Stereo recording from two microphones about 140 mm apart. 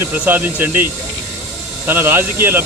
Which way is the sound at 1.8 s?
15° right (ahead or behind).